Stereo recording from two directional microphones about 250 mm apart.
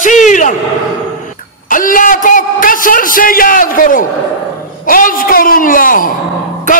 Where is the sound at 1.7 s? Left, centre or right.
Left.